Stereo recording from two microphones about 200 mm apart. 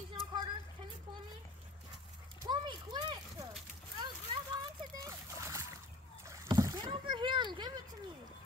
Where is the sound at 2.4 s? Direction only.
25° right (ahead or behind).